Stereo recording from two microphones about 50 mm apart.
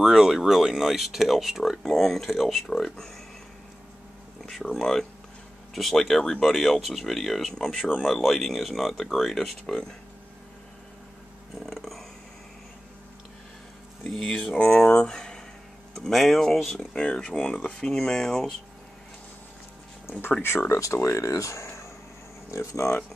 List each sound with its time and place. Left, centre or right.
0.0 s speech: centre
4.5 s speech: centre
11.6 s speech: centre
14.1 s speech: centre
15.9 s speech: centre
16.9 s speech: centre
20.1 s speech: left
20.4 s speech: left
22.5 s speech: left